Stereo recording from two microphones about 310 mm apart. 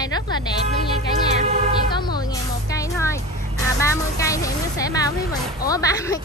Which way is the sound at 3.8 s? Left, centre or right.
Centre.